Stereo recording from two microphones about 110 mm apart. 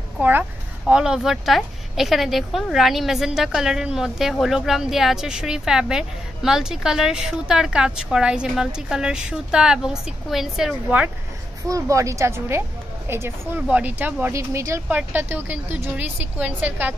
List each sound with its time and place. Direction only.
0.2 s speech: 15° right (ahead or behind)
11.6 s a woman's voice: 30° right (ahead or behind)
14.3 s speech: 25° right (ahead or behind)
14.9 s a woman's voice: 15° right (ahead or behind)